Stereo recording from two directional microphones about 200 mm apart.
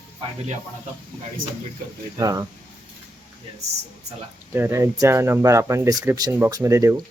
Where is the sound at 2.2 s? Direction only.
15° right (ahead or behind).